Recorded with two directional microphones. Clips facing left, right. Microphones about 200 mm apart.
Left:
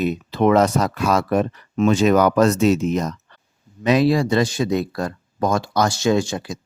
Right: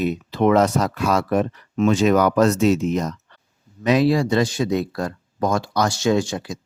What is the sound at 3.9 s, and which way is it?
Speech, 25° left (ahead or behind).